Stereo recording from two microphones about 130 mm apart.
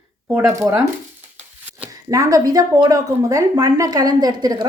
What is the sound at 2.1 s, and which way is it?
Speech, 25° right (ahead or behind).